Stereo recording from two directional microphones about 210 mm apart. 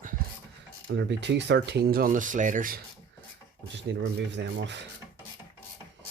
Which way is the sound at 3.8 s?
55° right (ahead or behind).